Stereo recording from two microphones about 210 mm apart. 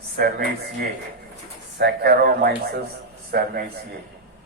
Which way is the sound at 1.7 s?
50° right (ahead or behind).